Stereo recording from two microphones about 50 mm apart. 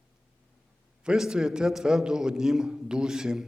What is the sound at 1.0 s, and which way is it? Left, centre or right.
A man's voice, centre.